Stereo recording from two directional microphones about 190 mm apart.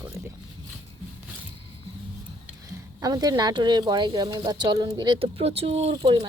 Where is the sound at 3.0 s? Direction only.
20° right (ahead or behind).